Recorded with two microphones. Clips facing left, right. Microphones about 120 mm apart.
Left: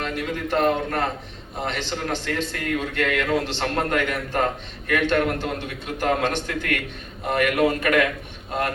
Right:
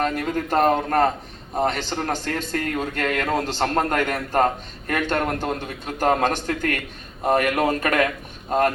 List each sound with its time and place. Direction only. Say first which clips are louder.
0.0 s a man's voice: right 4 dB; 45° right (ahead or behind)